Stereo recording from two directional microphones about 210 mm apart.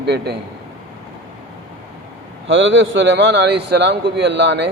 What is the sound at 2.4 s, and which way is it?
Speech, 65° right (ahead or behind).